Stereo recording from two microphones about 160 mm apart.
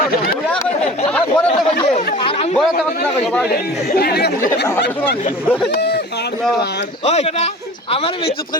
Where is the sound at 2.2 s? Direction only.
35° left (ahead or behind).